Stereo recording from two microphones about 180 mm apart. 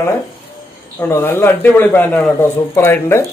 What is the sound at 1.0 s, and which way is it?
A man's voice, 15° left (ahead or behind).